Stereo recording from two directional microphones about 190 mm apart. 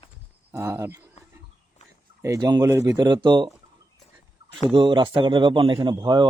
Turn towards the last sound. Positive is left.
turn(degrees=-25)  # may be behind; listen again after turning